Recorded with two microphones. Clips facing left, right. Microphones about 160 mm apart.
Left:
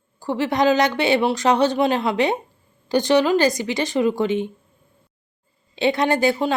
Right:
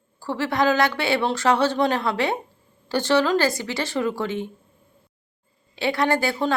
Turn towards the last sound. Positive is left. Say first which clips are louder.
# left 3 dB
turn(degrees=20)  # may be behind; listen again after turning